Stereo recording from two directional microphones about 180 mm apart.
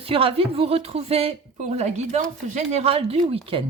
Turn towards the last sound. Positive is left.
turn(degrees=-30)  # may be behind; listen again after turning